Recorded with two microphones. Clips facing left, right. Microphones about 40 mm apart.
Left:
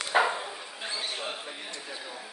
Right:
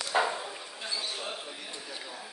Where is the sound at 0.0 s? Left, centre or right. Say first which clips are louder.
Left 3 dB; left.